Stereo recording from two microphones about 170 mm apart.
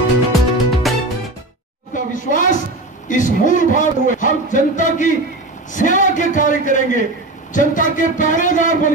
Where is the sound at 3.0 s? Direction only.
50° left (ahead or behind).